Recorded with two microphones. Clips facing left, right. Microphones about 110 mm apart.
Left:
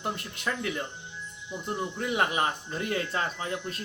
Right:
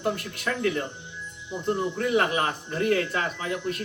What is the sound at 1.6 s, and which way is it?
Speech, 20° left (ahead or behind).